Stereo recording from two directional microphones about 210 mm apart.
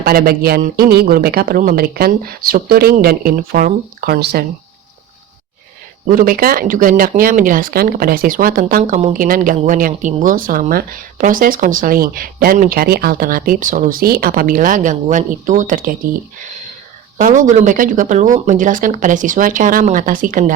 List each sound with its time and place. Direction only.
0.0 s speech: 45° right (ahead or behind)
6.1 s speech: 45° right (ahead or behind)
17.2 s speech: 35° right (ahead or behind)